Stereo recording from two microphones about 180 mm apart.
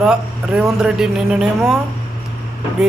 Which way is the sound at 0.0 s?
5° right (ahead or behind).